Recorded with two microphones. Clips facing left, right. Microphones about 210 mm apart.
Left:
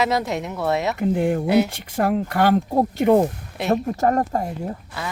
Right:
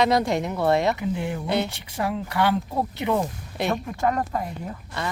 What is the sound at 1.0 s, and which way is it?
Speech, 50° left (ahead or behind).